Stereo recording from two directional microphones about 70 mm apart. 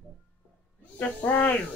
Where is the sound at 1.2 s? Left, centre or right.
Left.